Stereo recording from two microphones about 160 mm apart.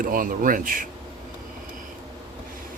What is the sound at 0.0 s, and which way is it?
Speech, 60° right (ahead or behind).